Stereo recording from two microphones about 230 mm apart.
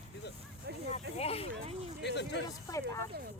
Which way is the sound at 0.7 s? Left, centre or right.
Right.